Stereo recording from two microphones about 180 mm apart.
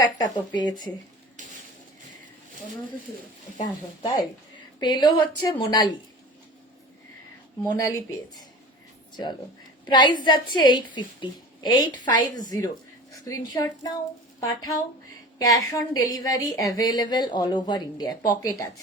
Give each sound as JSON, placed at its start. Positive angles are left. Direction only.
{"t": 0.0, "sound": "a woman's voice", "side_deg": 25}
{"t": 3.6, "sound": "a woman's voice", "side_deg": 25}
{"t": 7.8, "sound": "speech", "side_deg": 20}
{"t": 9.8, "sound": "a woman's voice", "side_deg": 25}